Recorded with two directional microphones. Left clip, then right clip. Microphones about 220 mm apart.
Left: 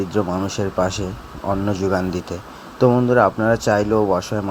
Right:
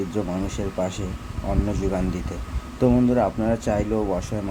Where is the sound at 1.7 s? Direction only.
10° left (ahead or behind).